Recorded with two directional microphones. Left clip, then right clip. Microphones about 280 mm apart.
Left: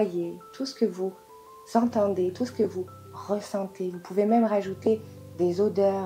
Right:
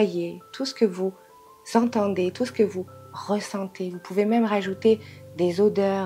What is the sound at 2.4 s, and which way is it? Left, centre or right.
Speech, right.